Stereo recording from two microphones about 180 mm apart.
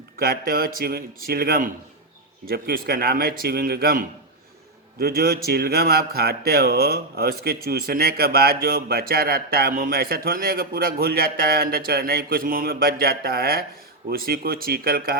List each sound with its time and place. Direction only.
0.2 s speech: 55° right (ahead or behind)